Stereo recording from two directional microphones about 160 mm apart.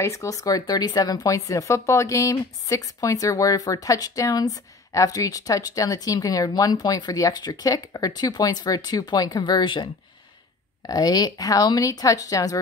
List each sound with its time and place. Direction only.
0.0 s speech: 20° left (ahead or behind)
10.9 s speech: 25° left (ahead or behind)